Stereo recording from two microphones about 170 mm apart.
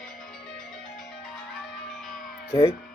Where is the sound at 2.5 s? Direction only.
20° left (ahead or behind).